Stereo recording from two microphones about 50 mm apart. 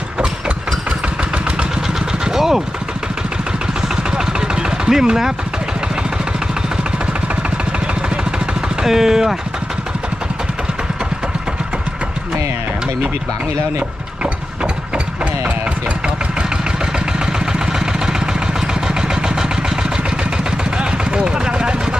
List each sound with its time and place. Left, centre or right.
0.2 s engine: right
2.2 s vehicle: centre
4.9 s speech: centre
8.8 s speech: centre
14.6 s a sound: right
17.4 s vehicle: centre
20.7 s a sound: centre